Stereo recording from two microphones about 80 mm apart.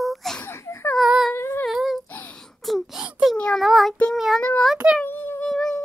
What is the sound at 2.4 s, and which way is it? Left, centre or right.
Wail, centre.